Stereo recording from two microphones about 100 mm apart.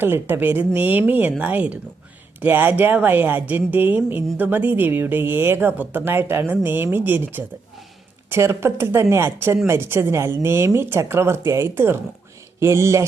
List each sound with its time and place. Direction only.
0.0 s a woman's voice: 20° right (ahead or behind)